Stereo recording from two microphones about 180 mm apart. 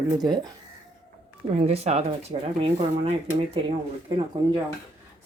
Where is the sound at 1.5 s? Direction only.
35° right (ahead or behind).